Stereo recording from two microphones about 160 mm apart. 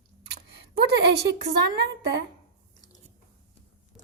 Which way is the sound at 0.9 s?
90° right.